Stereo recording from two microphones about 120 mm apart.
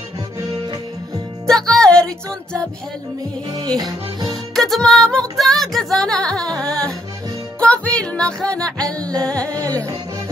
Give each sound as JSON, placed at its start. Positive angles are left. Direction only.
{"t": 1.5, "sound": "music", "side_deg": 5}
{"t": 3.4, "sound": "music", "side_deg": -35}
{"t": 4.6, "sound": "music", "side_deg": 0}
{"t": 7.6, "sound": "music", "side_deg": 10}
{"t": 9.6, "sound": "music", "side_deg": -30}